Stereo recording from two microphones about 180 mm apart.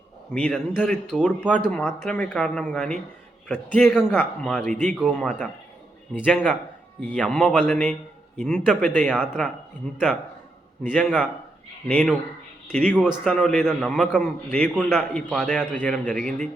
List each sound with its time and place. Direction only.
0.3 s a man's voice: 10° left (ahead or behind)
4.7 s speech: 45° right (ahead or behind)
5.1 s a man's voice: 5° left (ahead or behind)